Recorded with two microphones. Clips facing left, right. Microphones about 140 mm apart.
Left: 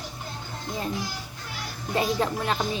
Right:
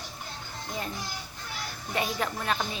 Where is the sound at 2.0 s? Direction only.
30° left (ahead or behind).